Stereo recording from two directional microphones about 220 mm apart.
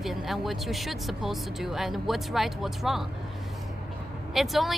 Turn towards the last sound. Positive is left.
turn(degrees=0)  # may be behind; listen again after turning